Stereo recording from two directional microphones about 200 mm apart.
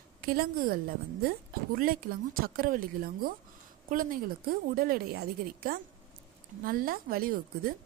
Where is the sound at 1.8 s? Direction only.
45° right (ahead or behind).